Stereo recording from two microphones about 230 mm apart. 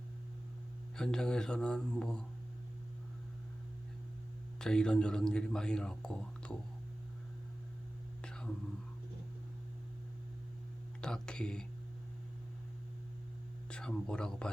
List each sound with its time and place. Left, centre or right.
0.9 s a man's voice: centre
4.6 s a man's voice: centre
8.2 s whispering: centre
11.0 s a sound: centre
13.7 s speech: centre